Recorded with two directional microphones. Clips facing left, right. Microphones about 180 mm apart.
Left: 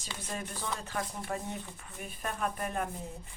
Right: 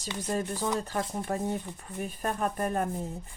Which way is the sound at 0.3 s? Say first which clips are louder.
Right 8 dB; 40° right (ahead or behind).